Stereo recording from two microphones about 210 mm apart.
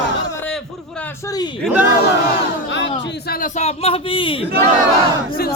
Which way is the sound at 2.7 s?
60° left (ahead or behind).